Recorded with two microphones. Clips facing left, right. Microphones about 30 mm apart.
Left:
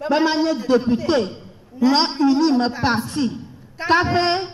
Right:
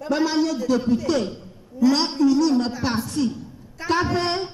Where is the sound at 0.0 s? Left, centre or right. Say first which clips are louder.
Left 3 dB; left.